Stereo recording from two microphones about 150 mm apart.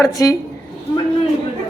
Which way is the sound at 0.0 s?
20° left (ahead or behind).